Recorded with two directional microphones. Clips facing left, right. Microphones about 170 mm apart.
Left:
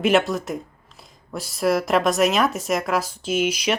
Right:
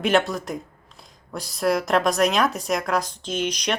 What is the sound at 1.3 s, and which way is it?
A woman's voice, centre (ahead or behind).